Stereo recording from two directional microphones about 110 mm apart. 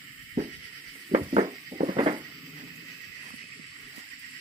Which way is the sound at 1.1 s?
70° right (ahead or behind).